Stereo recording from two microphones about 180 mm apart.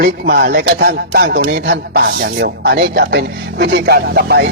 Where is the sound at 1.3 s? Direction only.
75° right (ahead or behind).